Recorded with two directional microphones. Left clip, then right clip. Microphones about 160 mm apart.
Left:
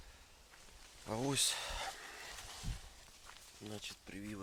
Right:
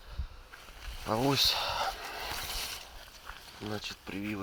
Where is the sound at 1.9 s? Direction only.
15° left (ahead or behind).